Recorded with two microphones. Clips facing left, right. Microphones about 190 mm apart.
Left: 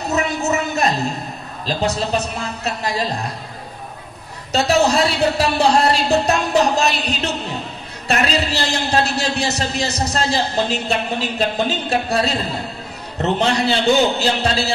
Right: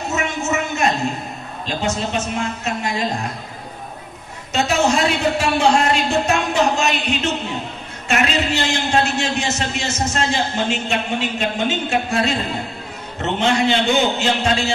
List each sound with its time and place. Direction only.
0.0 s a sound: 35° left (ahead or behind)
1.7 s a man's voice: 35° left (ahead or behind)
4.5 s a man's voice: 35° left (ahead or behind)